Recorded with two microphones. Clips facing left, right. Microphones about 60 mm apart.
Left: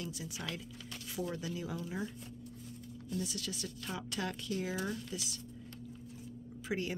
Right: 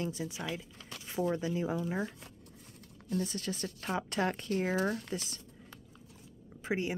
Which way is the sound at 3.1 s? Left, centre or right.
Right.